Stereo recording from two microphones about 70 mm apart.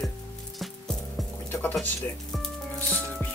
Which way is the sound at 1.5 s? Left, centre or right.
Left.